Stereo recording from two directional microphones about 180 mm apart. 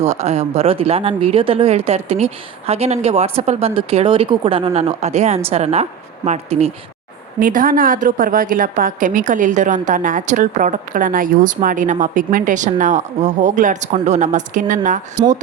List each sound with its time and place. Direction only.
0.0 s speech: 35° right (ahead or behind)
7.3 s a woman's voice: 50° right (ahead or behind)